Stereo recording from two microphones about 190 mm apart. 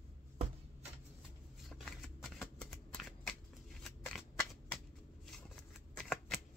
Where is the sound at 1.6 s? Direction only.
Centre (ahead or behind).